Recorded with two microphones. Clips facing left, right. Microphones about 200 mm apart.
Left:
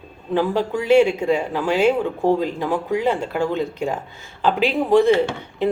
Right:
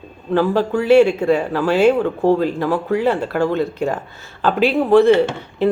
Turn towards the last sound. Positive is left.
turn(degrees=15)  # may be behind; listen again after turning